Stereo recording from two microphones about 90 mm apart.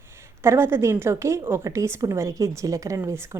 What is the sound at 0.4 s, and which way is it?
A woman's voice, 30° right (ahead or behind).